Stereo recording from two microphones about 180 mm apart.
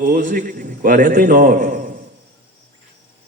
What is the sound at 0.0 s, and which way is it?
A man's voice, 45° right (ahead or behind).